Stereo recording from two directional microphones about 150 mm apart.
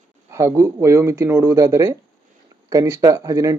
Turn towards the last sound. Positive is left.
turn(degrees=-20)  # may be behind; listen again after turning